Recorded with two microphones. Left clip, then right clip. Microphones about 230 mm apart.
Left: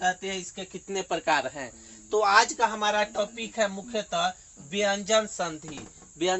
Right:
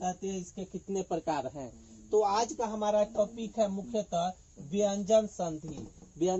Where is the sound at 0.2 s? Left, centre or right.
Centre.